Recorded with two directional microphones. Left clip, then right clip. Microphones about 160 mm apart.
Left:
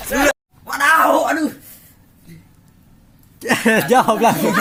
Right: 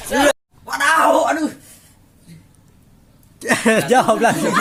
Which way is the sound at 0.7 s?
10° left (ahead or behind).